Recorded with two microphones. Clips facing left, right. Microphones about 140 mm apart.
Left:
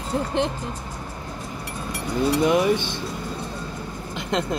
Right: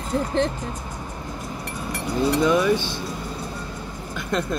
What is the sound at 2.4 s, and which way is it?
Speech, 20° left (ahead or behind).